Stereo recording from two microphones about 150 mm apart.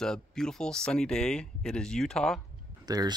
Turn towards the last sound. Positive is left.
turn(degrees=-25)  # may be behind; listen again after turning